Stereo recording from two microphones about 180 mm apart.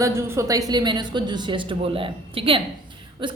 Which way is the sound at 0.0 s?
15° right (ahead or behind).